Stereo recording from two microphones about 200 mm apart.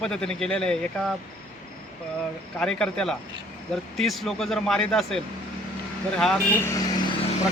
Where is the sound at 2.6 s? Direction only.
5° left (ahead or behind).